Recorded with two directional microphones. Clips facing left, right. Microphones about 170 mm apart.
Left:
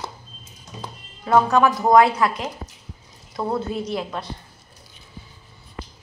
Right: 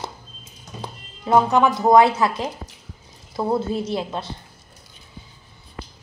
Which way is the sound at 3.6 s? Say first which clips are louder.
Right 2 dB; 5° right (ahead or behind).